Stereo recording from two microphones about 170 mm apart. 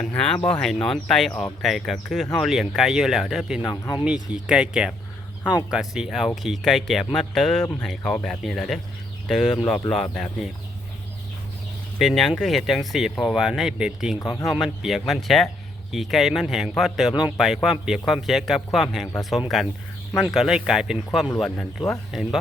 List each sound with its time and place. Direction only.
0.0 s speech: 5° left (ahead or behind)
3.7 s speech: 25° left (ahead or behind)
4.0 s speech: 5° right (ahead or behind)
11.9 s speech: centre (ahead or behind)